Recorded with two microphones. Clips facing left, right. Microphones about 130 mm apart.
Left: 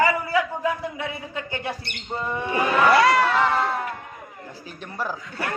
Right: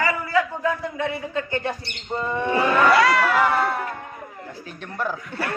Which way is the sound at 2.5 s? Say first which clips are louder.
Even; 25° left (ahead or behind).